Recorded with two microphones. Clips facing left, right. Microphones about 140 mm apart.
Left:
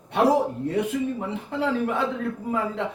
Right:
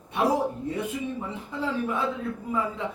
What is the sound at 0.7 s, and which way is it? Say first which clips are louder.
A man's voice: left 5 dB; 70° left (ahead or behind).